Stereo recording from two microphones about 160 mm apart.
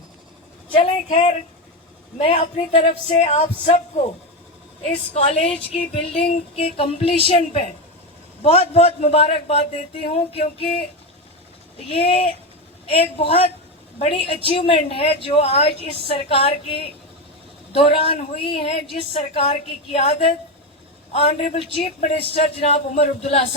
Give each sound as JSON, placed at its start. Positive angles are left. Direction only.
{"t": 1.0, "sound": "a woman's voice", "side_deg": 45}
{"t": 4.9, "sound": "a woman's voice", "side_deg": 40}
{"t": 11.9, "sound": "a woman's voice", "side_deg": 35}